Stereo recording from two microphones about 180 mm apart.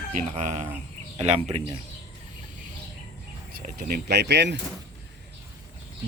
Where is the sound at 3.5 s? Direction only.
55° right (ahead or behind); by 4.5 s 70° right (ahead or behind).